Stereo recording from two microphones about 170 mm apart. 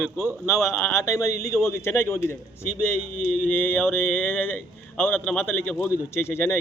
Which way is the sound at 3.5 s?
10° left (ahead or behind).